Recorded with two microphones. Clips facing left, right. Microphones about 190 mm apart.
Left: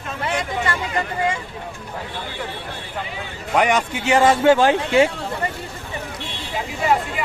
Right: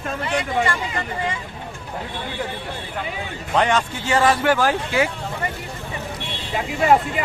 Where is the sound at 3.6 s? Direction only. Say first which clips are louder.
Left 1 dB; 15° left (ahead or behind).